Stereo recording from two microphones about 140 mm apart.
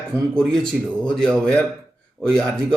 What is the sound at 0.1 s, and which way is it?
Speech, 5° left (ahead or behind).